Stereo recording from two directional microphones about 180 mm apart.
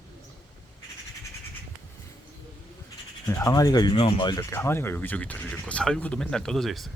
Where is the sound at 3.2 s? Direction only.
15° left (ahead or behind).